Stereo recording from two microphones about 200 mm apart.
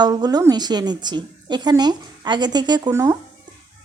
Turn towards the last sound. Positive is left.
turn(degrees=-15)  # may be behind; listen again after turning